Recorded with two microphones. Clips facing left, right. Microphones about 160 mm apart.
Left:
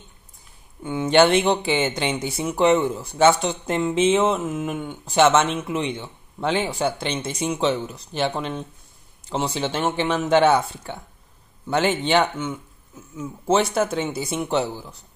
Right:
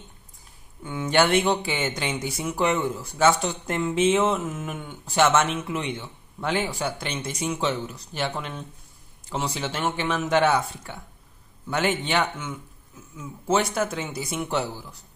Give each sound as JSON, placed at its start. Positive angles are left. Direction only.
{"t": 0.8, "sound": "speech", "side_deg": 25}